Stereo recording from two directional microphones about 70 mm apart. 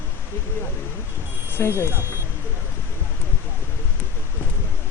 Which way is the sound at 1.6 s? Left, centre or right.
Left.